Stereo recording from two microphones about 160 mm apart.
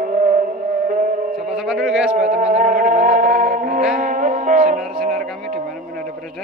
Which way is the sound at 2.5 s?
55° right (ahead or behind).